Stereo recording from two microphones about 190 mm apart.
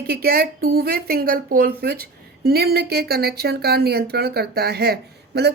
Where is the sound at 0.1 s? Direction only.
55° right (ahead or behind).